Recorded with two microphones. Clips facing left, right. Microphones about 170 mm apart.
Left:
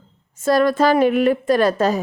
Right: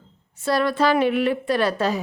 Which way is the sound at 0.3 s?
45° left (ahead or behind).